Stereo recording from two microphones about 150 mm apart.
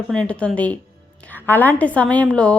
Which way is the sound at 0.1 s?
5° left (ahead or behind).